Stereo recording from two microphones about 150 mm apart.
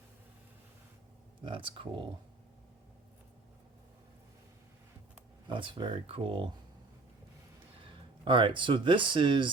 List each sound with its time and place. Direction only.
1.5 s speech: 35° right (ahead or behind)
5.5 s speech: 35° right (ahead or behind)
8.2 s speech: 35° right (ahead or behind)